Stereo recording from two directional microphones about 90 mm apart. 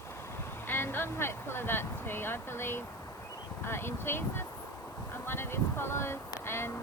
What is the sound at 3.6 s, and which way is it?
Speech, 25° left (ahead or behind).